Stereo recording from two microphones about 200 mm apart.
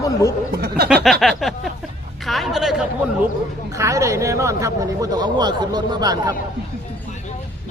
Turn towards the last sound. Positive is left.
turn(degrees=-20)  # may be behind; listen again after turning